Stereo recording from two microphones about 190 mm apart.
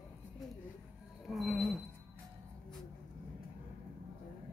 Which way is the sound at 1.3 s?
Centre (ahead or behind).